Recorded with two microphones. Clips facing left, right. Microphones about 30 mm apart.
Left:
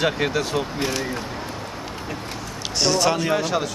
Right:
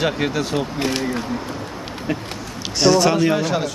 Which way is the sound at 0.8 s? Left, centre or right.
Right.